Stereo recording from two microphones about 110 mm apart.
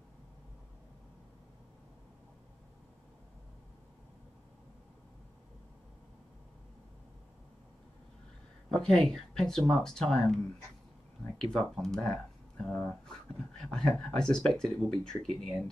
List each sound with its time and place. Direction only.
8.6 s speech: 5° left (ahead or behind)